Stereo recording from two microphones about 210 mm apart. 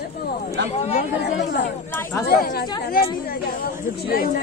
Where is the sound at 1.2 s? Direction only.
55° left (ahead or behind).